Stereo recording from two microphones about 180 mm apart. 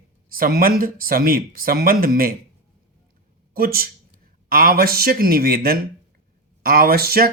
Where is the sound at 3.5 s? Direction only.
55° right (ahead or behind).